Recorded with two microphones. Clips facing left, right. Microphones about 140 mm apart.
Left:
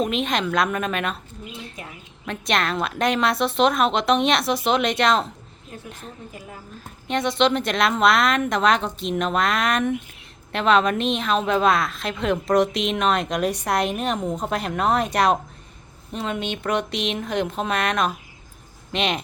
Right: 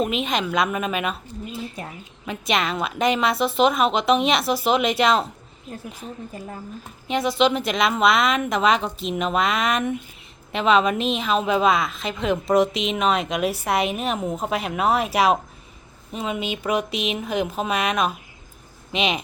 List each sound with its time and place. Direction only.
0.0 s a woman's voice: centre (ahead or behind)
7.1 s a woman's voice: 5° right (ahead or behind)